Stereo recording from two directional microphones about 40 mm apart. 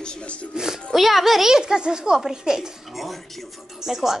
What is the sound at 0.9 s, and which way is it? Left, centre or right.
A child's voice, centre.